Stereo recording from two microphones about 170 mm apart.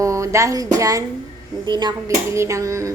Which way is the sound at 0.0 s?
15° right (ahead or behind).